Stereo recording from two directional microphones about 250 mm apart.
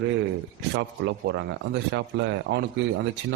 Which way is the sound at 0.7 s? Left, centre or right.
Right.